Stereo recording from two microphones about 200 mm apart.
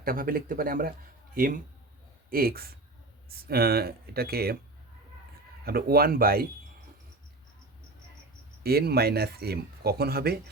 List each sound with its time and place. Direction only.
0.0 s speech: 45° right (ahead or behind)
5.6 s speech: 50° right (ahead or behind)
8.6 s speech: 50° right (ahead or behind)